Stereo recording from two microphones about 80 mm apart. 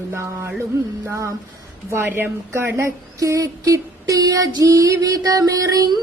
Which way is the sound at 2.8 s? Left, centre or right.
Right.